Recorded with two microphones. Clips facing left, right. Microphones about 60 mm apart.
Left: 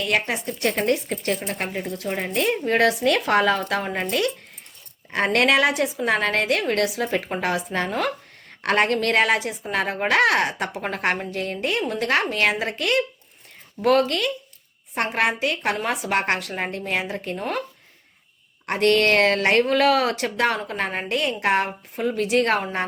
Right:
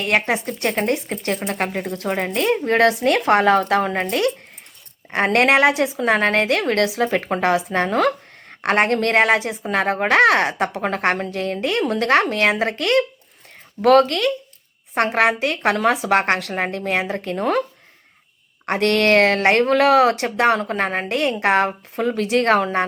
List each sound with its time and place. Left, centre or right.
0.0 s a woman's voice: right
6.8 s a woman's voice: right
7.1 s speech: right
7.9 s speech: right
8.4 s a woman's voice: right
18.6 s speech: right